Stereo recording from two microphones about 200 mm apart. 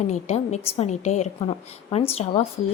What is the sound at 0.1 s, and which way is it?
A woman's voice, 35° left (ahead or behind).